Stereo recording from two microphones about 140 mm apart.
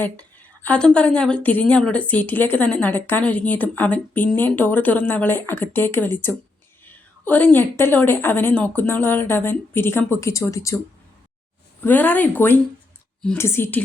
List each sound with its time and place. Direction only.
0.0 s a woman's voice: 10° left (ahead or behind)
11.8 s a woman's voice: 10° left (ahead or behind)